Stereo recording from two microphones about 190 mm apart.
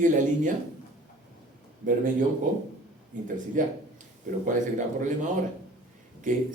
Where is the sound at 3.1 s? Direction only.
40° right (ahead or behind).